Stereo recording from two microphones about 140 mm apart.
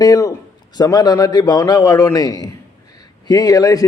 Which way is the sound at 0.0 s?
25° left (ahead or behind).